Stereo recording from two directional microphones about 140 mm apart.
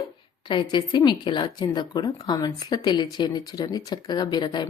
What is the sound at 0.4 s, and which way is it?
A woman's voice, 35° left (ahead or behind).